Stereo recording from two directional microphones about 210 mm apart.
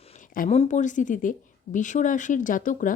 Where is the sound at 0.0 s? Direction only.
35° left (ahead or behind).